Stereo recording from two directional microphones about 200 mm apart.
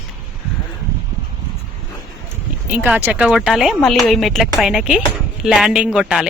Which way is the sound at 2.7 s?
10° right (ahead or behind).